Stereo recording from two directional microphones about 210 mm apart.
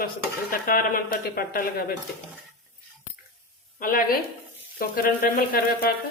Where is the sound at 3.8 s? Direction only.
45° left (ahead or behind).